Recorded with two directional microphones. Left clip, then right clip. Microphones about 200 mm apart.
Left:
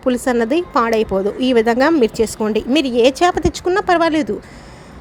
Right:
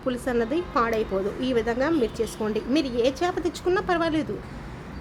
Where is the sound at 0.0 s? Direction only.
35° left (ahead or behind).